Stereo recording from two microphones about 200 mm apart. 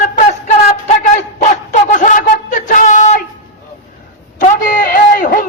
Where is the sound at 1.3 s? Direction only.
40° left (ahead or behind).